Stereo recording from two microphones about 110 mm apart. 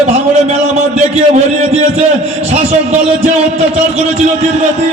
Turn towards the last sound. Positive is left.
turn(degrees=-90)